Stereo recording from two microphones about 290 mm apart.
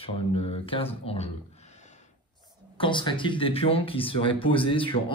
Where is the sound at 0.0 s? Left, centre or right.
Centre.